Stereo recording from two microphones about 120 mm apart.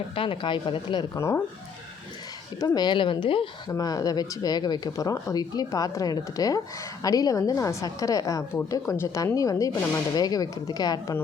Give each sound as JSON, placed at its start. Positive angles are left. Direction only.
{"t": 0.1, "sound": "speech", "side_deg": 50}
{"t": 1.1, "sound": "speech", "side_deg": 25}
{"t": 2.6, "sound": "speech", "side_deg": 35}
{"t": 3.7, "sound": "speech", "side_deg": 30}